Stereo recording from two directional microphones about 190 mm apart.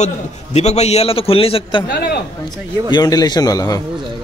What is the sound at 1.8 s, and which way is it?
Speech, 60° left (ahead or behind).